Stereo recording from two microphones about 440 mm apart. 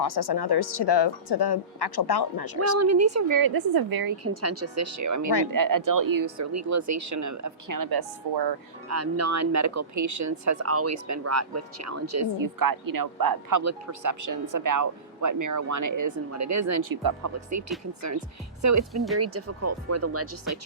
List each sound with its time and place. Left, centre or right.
0.0 s speech: left
2.7 s speech: right
4.2 s speech: right
8.9 s speech: right
17.0 s speech: right
18.6 s speech: right